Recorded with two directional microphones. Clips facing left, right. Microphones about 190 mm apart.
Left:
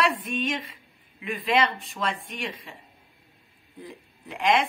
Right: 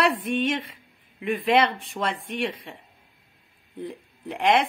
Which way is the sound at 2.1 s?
30° right (ahead or behind).